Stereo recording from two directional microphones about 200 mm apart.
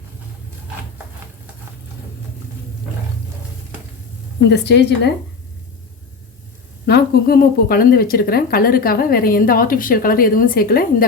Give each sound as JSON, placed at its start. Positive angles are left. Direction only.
{"t": 4.4, "sound": "a woman's voice", "side_deg": 60}
{"t": 6.8, "sound": "a woman's voice", "side_deg": 50}